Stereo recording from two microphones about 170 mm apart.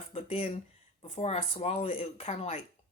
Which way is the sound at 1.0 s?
40° left (ahead or behind).